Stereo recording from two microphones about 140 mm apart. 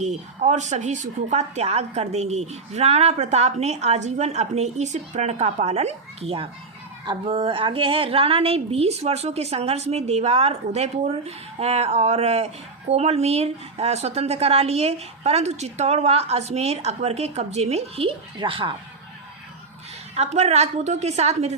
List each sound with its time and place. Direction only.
0.0 s speech: 55° right (ahead or behind)
18.3 s speech: 35° right (ahead or behind)
20.1 s speech: 50° right (ahead or behind)